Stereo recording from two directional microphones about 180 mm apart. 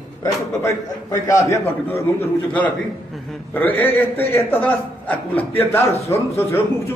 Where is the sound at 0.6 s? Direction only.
15° left (ahead or behind).